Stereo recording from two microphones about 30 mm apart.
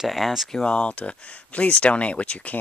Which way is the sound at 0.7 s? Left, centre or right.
Left.